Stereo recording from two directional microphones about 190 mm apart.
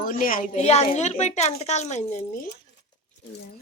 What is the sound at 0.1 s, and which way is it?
A woman's voice, 45° left (ahead or behind).